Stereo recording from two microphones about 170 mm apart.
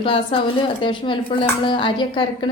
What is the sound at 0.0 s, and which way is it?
A woman's voice, 30° left (ahead or behind).